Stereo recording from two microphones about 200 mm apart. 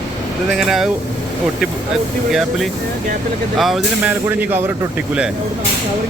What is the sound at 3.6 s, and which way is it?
Speech, centre (ahead or behind).